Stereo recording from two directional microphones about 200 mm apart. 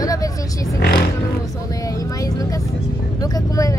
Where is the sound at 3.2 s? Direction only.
15° left (ahead or behind).